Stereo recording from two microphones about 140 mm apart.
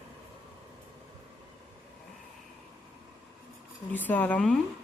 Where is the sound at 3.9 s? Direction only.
10° left (ahead or behind).